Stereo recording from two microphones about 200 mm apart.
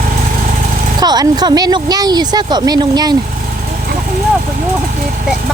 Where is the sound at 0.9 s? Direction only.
20° right (ahead or behind).